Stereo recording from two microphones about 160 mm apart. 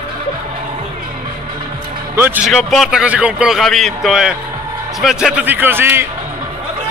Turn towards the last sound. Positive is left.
turn(degrees=-15)  # may be behind; listen again after turning